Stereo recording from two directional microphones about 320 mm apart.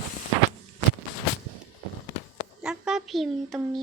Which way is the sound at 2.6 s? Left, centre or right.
Centre.